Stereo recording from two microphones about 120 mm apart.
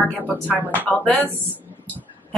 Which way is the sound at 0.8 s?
10° left (ahead or behind).